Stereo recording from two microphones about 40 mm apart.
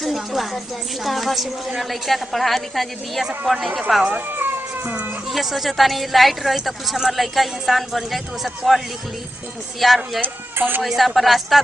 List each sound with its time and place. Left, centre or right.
0.0 s a sound: centre
1.0 s speech: centre
5.3 s speech: centre
10.2 s speech: right
10.8 s speech: centre